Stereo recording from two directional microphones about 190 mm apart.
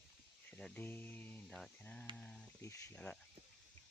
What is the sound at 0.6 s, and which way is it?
Speech, 10° left (ahead or behind).